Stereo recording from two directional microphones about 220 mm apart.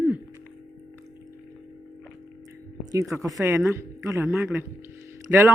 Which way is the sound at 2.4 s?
15° right (ahead or behind).